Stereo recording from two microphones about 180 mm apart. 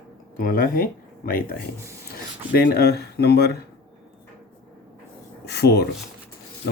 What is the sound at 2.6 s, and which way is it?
Speech, 60° left (ahead or behind).